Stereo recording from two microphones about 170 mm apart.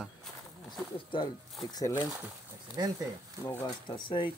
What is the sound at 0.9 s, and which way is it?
Speech, 30° left (ahead or behind).